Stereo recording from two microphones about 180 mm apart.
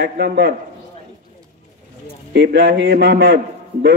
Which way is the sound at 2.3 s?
65° right (ahead or behind).